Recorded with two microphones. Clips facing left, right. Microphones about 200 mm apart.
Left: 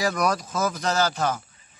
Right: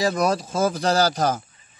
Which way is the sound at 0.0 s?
25° right (ahead or behind).